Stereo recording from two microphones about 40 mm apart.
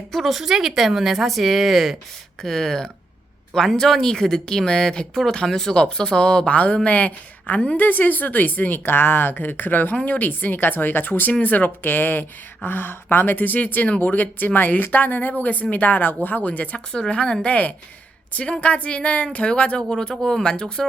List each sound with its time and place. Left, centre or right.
0.1 s speech: centre
2.4 s speech: centre
6.5 s speech: left
7.8 s speech: left
8.8 s speech: left
13.3 s speech: left
16.7 s speech: left